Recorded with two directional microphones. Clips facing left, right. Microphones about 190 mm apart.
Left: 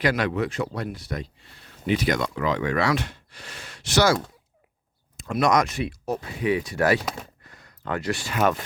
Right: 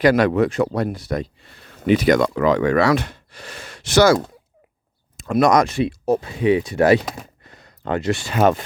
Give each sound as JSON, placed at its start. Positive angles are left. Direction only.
{"t": 0.0, "sound": "speech", "side_deg": -45}
{"t": 5.3, "sound": "speech", "side_deg": -40}
{"t": 7.4, "sound": "a sound", "side_deg": -25}